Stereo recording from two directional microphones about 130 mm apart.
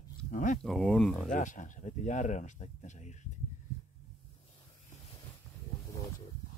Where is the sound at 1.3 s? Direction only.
75° left (ahead or behind).